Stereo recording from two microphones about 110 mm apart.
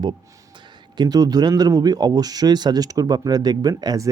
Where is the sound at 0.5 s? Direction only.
45° right (ahead or behind).